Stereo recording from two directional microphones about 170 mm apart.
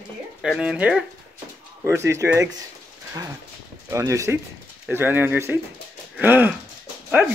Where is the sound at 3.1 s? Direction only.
20° right (ahead or behind).